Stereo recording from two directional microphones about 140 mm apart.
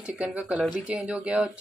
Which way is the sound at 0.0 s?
10° right (ahead or behind).